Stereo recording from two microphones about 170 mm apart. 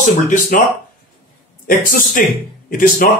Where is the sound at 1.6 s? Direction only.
55° left (ahead or behind).